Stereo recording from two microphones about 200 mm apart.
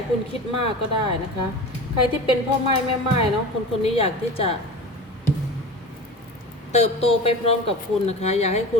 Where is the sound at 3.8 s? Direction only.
30° left (ahead or behind).